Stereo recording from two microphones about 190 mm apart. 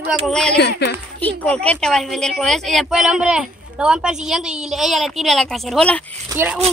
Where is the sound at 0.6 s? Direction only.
60° left (ahead or behind).